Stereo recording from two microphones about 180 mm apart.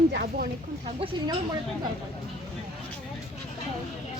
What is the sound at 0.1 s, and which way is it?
Speech, 60° right (ahead or behind).